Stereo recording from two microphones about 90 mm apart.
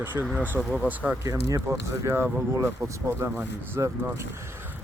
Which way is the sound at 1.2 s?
40° right (ahead or behind).